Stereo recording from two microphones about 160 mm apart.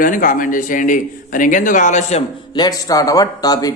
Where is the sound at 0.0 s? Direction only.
55° left (ahead or behind).